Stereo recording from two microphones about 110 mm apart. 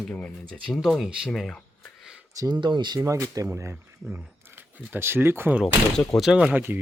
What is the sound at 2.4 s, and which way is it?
Speech, 35° right (ahead or behind).